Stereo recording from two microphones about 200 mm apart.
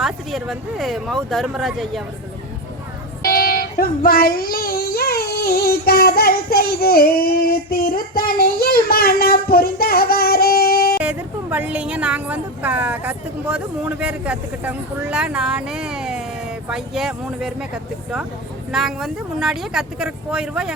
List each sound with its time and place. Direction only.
0.0 s speech: centre (ahead or behind)
3.2 s a child's voice: 45° left (ahead or behind)
11.0 s speech: 5° right (ahead or behind)
18.7 s speech: centre (ahead or behind)